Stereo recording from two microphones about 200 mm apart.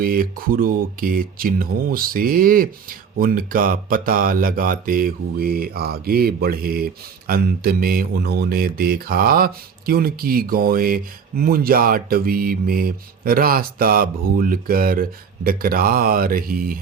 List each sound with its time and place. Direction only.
0.0 s speech: 45° right (ahead or behind)